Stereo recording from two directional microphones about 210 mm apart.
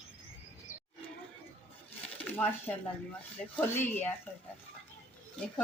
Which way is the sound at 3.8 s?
10° left (ahead or behind).